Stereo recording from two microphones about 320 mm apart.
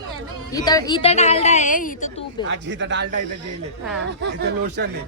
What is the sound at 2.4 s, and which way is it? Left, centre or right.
Speech, right.